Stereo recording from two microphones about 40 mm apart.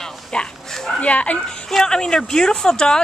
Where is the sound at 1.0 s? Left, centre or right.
Left.